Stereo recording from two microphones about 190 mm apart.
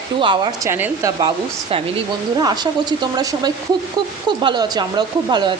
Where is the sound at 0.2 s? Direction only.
25° right (ahead or behind).